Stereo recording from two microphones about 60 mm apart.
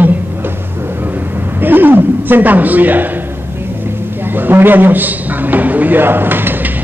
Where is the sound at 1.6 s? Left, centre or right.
Right.